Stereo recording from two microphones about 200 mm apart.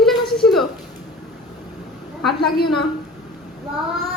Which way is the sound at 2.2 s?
Centre (ahead or behind).